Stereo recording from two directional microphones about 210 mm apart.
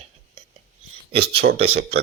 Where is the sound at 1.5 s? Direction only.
25° right (ahead or behind).